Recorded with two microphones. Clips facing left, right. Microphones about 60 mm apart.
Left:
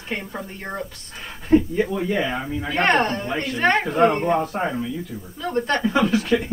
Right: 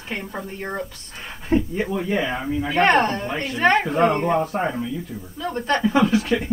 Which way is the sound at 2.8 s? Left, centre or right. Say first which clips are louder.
Right 1 dB; centre.